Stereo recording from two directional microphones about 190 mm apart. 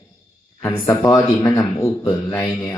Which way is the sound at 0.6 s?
10° left (ahead or behind).